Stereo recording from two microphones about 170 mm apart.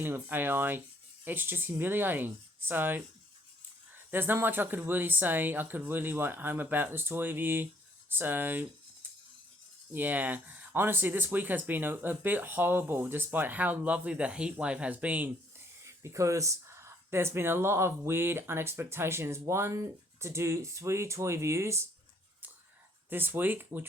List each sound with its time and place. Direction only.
0.0 s speech: 10° right (ahead or behind)
9.9 s speech: 10° right (ahead or behind)
23.0 s speech: 10° right (ahead or behind)